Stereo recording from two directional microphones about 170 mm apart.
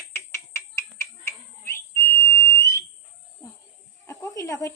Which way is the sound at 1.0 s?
15° left (ahead or behind).